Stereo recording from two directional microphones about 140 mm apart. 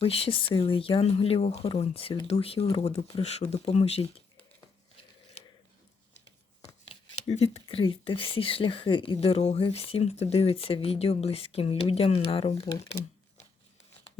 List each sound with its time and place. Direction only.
0.0 s speech: 40° left (ahead or behind)
6.1 s speech: 50° left (ahead or behind)